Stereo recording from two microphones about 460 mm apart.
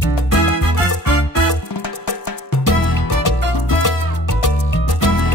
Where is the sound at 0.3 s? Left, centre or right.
Left.